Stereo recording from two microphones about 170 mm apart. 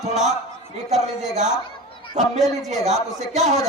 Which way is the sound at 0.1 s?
40° right (ahead or behind).